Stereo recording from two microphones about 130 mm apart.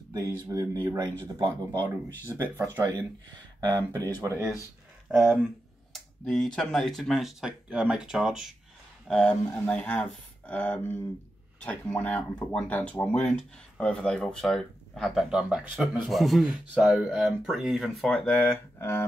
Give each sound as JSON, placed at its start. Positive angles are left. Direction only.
{"t": 0.1, "sound": "speech", "side_deg": -30}
{"t": 1.8, "sound": "speech", "side_deg": 15}
{"t": 2.2, "sound": "speech", "side_deg": -20}
{"t": 5.0, "sound": "speech", "side_deg": -5}